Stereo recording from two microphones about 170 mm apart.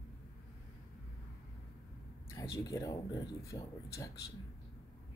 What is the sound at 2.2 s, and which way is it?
Speech, 15° left (ahead or behind).